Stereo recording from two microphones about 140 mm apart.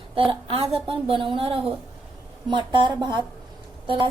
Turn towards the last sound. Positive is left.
turn(degrees=-40)  # may be behind; listen again after turning